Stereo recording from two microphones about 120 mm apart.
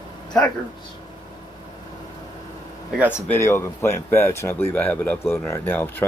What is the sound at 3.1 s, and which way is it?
Speech, 20° left (ahead or behind).